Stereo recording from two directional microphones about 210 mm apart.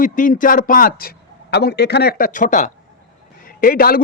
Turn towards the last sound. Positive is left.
turn(degrees=45)  # may be behind; listen again after turning